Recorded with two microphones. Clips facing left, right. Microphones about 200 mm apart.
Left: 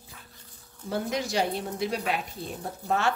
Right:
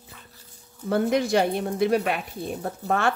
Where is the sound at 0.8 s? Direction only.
55° right (ahead or behind).